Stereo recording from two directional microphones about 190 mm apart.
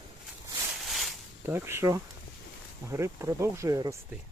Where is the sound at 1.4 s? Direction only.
10° right (ahead or behind).